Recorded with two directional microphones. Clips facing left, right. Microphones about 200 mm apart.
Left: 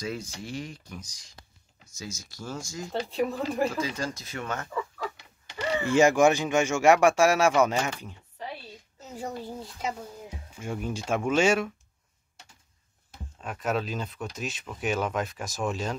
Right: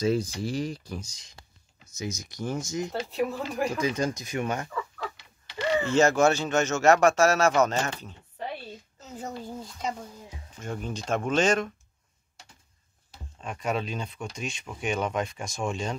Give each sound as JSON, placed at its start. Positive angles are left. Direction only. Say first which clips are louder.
{"t": 0.0, "sound": "speech", "louder": "right 9 dB", "side_deg": -30}
{"t": 3.1, "sound": "speech", "louder": "left 1 dB", "side_deg": 0}
{"t": 3.7, "sound": "speech", "louder": "right 4 dB", "side_deg": -20}
{"t": 5.9, "sound": "speech", "louder": "left 2 dB", "side_deg": 15}
{"t": 13.4, "sound": "speech", "louder": "left 1 dB", "side_deg": 5}